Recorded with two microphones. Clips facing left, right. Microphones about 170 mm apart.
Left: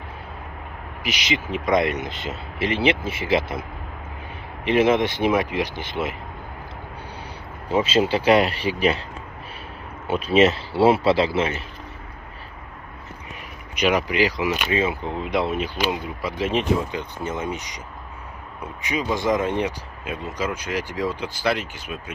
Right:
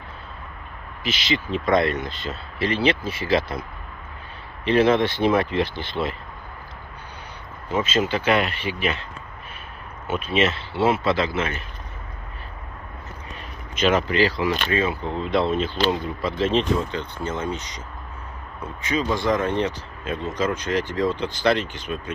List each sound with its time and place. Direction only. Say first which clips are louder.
1.0 s speech: right 1 dB; 15° left (ahead or behind)
4.6 s speech: even; 15° left (ahead or behind)
7.7 s speech: left 3 dB; 30° left (ahead or behind)
10.0 s speech: left 5 dB; 35° left (ahead or behind)
13.7 s speech: right 1 dB; 15° left (ahead or behind)